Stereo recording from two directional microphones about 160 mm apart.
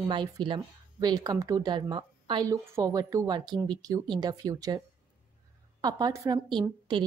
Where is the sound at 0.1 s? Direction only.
30° right (ahead or behind).